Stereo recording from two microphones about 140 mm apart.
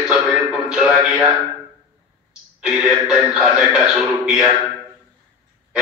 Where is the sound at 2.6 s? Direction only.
5° right (ahead or behind).